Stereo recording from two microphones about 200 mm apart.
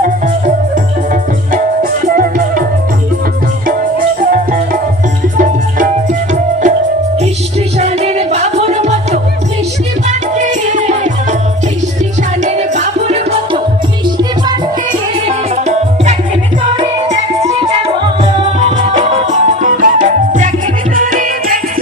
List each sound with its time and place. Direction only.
1.5 s music: 45° right (ahead or behind)
4.2 s music: 45° right (ahead or behind)
7.8 s music: 35° right (ahead or behind)
10.1 s music: 35° right (ahead or behind)
12.5 s music: 35° right (ahead or behind)
15.3 s music: 35° right (ahead or behind)